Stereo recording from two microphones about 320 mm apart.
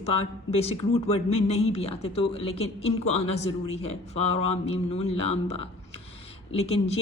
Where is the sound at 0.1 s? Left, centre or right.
Centre.